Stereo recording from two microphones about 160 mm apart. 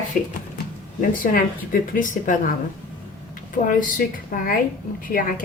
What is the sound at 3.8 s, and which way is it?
Speech, 60° left (ahead or behind).